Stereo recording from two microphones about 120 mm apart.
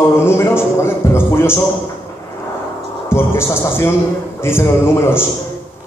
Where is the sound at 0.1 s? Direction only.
20° left (ahead or behind).